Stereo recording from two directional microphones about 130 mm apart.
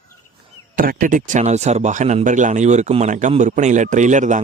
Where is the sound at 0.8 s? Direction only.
90° right.